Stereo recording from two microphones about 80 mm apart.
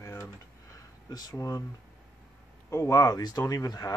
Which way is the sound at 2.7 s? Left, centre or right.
Left.